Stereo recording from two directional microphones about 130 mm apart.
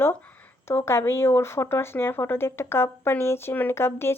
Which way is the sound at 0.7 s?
20° left (ahead or behind).